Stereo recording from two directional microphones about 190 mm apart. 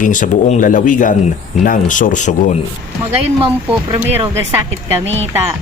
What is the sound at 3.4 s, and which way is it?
Speech, 25° right (ahead or behind).